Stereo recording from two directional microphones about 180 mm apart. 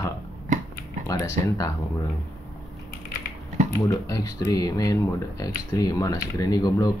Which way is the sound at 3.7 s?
20° left (ahead or behind).